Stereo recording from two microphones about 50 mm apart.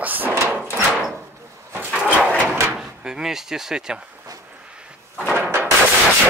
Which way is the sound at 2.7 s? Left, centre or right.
Centre.